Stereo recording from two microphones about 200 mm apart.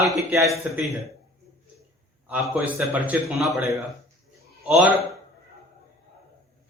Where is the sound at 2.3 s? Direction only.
10° right (ahead or behind).